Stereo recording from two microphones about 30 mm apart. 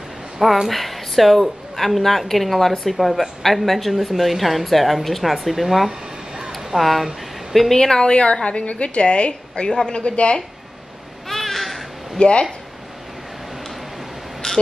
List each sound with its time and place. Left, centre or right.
0.7 s speech: centre
7.7 s speech: left
8.1 s a woman's voice: left
9.7 s speech: left
9.9 s a woman's voice: left
11.2 s a sound: centre
12.2 s a woman's voice: left
14.4 s a sound: left